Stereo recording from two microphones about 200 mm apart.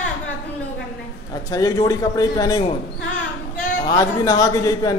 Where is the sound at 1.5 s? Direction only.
15° left (ahead or behind).